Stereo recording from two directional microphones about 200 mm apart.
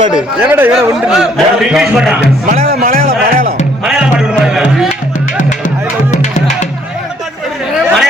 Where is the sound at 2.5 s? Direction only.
45° right (ahead or behind).